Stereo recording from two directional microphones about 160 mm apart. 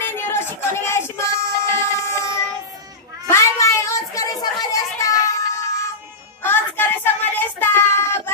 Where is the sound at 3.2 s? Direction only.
20° left (ahead or behind).